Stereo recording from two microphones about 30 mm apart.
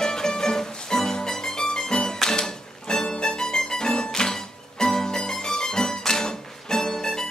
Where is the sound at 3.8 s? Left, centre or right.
Left.